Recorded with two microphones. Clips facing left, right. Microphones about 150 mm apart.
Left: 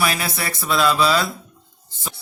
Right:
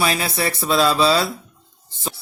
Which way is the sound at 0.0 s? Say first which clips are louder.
Right 2 dB; 25° right (ahead or behind).